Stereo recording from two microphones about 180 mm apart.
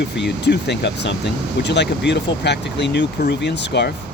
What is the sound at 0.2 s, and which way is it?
Speech, 70° left (ahead or behind).